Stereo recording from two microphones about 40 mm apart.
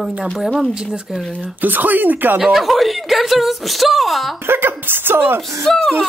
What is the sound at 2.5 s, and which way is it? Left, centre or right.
A woman's voice, centre.